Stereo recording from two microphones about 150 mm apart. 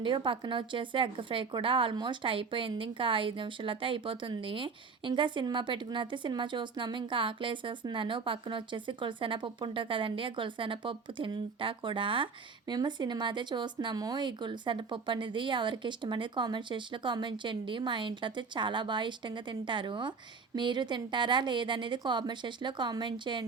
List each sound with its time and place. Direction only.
0.0 s speech: 35° right (ahead or behind)